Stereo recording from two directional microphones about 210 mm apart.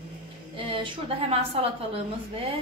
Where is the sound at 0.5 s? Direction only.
25° right (ahead or behind).